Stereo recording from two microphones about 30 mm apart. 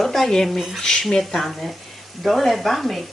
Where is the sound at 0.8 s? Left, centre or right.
Left.